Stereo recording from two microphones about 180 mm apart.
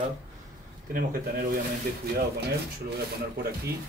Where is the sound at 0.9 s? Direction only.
55° right (ahead or behind).